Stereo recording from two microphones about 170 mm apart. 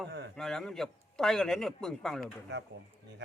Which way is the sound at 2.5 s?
90° right.